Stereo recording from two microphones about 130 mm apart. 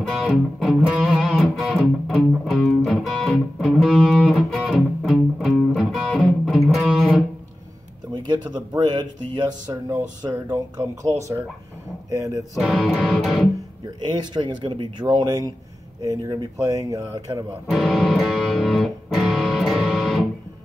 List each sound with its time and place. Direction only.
0.0 s music: 5° right (ahead or behind)
8.1 s speech: 35° right (ahead or behind)
9.7 s speech: 15° right (ahead or behind)
12.5 s music: centre (ahead or behind)
13.9 s speech: 35° right (ahead or behind)
17.6 s music: centre (ahead or behind)